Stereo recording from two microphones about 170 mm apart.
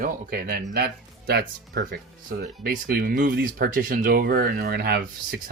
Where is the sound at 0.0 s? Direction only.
55° right (ahead or behind).